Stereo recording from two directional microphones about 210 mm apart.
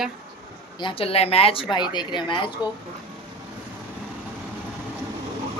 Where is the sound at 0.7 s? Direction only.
25° left (ahead or behind).